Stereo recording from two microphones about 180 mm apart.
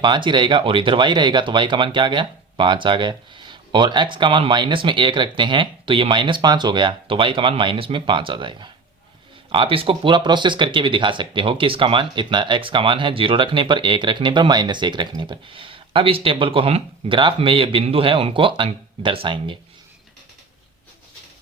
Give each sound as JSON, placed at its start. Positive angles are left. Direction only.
{"t": 0.0, "sound": "speech", "side_deg": -25}